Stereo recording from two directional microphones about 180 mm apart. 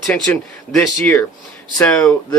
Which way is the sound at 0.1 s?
5° left (ahead or behind).